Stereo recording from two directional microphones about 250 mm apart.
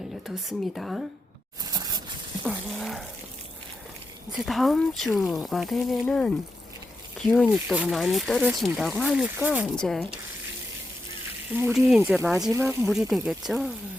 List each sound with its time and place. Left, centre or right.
0.3 s speech: centre
1.6 s a sound: centre
2.5 s speech: centre
4.3 s speech: centre
7.3 s speech: centre
11.5 s speech: centre